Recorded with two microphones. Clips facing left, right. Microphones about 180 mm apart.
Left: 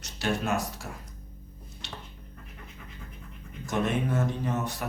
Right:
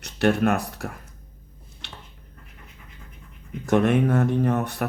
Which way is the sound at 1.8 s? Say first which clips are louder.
Left 2 dB; 60° right (ahead or behind).